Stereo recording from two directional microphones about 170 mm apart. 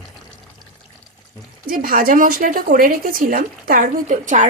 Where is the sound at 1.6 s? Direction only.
55° right (ahead or behind).